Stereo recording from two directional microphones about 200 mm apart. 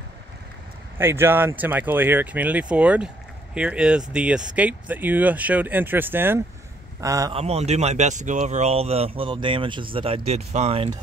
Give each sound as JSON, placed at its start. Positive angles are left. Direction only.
{"t": 0.9, "sound": "speech", "side_deg": -10}
{"t": 7.3, "sound": "speech", "side_deg": -30}